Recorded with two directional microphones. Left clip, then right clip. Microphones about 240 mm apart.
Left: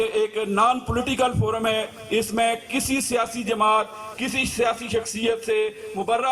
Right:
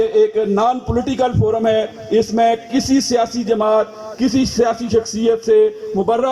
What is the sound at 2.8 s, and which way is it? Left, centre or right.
Music, centre.